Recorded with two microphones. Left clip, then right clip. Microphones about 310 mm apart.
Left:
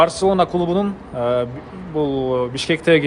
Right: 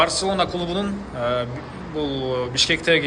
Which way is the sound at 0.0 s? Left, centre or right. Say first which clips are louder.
Left 5 dB; centre.